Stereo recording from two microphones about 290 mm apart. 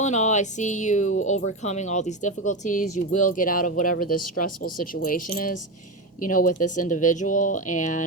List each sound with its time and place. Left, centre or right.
0.0 s speech: left